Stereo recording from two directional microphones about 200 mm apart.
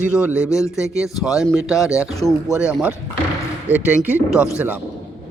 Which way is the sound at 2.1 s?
20° left (ahead or behind).